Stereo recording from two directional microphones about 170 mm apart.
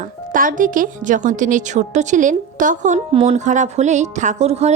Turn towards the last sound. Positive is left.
turn(degrees=-40)  # may be behind; listen again after turning